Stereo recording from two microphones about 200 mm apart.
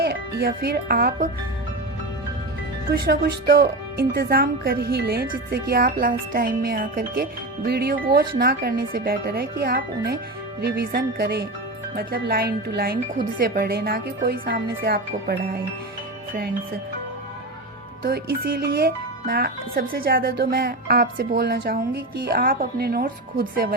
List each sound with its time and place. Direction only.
0.0 s speech: 50° right (ahead or behind)
3.1 s speech: 50° right (ahead or behind)
18.0 s speech: 50° right (ahead or behind)